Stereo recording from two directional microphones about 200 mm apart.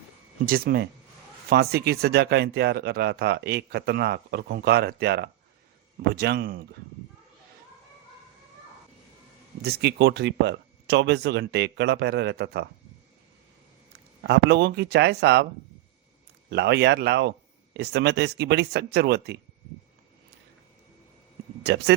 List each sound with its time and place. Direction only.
0.4 s speech: 45° right (ahead or behind)
9.6 s speech: 55° right (ahead or behind)
14.3 s speech: 55° right (ahead or behind)
16.5 s speech: 55° right (ahead or behind)
21.6 s speech: 55° right (ahead or behind)